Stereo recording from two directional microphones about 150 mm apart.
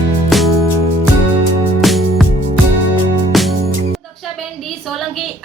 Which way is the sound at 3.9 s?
Centre (ahead or behind).